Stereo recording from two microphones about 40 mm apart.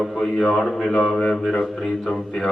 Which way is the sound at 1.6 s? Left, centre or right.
Centre.